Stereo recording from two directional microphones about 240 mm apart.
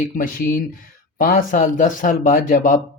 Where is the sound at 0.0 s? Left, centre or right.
Left.